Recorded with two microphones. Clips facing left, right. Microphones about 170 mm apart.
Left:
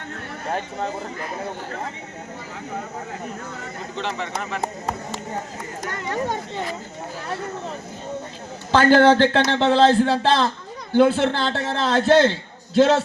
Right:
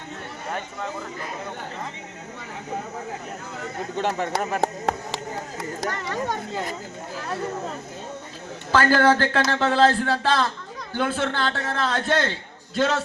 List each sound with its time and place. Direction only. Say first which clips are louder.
3.9 s speech: right 3 dB; 45° right (ahead or behind)
4.6 s speech: right 3 dB; 70° right (ahead or behind)
8.7 s a man's voice: left 4 dB; 25° left (ahead or behind)